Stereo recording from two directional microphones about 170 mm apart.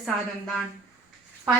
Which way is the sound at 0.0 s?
Centre (ahead or behind).